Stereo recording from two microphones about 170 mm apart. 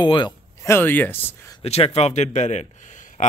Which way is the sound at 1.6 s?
35° left (ahead or behind).